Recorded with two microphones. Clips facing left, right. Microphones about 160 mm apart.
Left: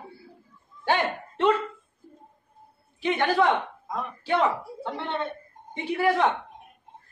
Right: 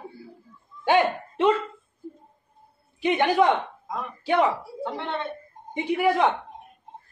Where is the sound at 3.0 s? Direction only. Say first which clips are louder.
Right 2 dB; 15° right (ahead or behind).